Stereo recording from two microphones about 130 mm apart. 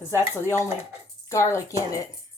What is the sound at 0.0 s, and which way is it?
Speech, 20° left (ahead or behind).